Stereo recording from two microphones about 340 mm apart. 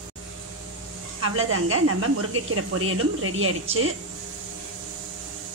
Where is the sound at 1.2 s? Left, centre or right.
Right.